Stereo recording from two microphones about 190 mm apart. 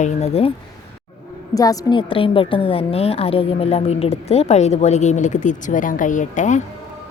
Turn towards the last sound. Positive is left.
turn(degrees=40)  # may be behind; listen again after turning